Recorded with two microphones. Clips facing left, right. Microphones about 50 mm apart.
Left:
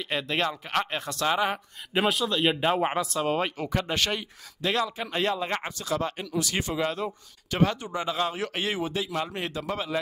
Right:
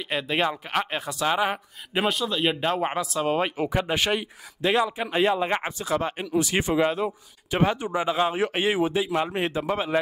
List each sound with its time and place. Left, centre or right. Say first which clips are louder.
0.0 s speech: right 3 dB; centre; by 9.9 s right